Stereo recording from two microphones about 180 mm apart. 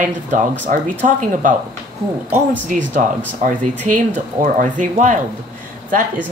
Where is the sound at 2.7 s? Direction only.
50° right (ahead or behind).